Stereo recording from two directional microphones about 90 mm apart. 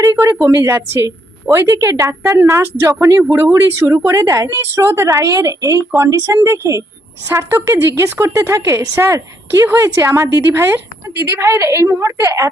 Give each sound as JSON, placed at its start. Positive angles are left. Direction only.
{"t": 0.0, "sound": "a woman's voice", "side_deg": -35}